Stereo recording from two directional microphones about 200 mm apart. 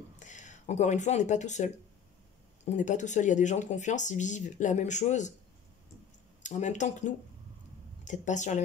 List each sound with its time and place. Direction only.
0.2 s speech: 40° left (ahead or behind)
6.4 s speech: 35° left (ahead or behind)